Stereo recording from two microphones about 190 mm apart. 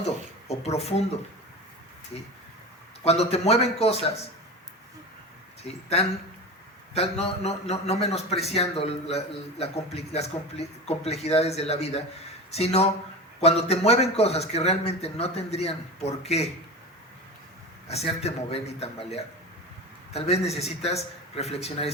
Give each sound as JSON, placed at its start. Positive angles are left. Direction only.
{"t": 0.0, "sound": "a sound", "side_deg": 35}
{"t": 3.0, "sound": "a man's voice", "side_deg": 35}
{"t": 5.6, "sound": "a man's voice", "side_deg": 35}
{"t": 17.8, "sound": "a man's voice", "side_deg": 35}